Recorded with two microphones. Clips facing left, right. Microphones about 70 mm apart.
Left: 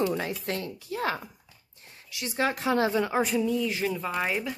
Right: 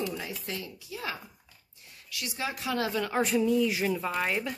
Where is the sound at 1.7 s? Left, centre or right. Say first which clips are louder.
Right 1 dB; left.